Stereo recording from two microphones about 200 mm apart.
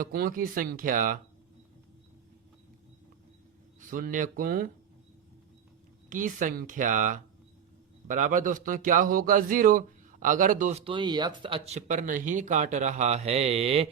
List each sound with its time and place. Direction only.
0.0 s speech: 45° right (ahead or behind)
3.8 s speech: 40° right (ahead or behind)
6.1 s a man's voice: 40° right (ahead or behind)